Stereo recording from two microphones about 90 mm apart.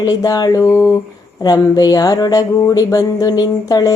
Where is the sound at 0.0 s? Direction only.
45° left (ahead or behind).